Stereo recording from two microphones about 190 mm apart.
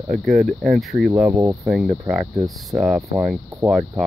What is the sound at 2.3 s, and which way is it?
Speech, 20° right (ahead or behind).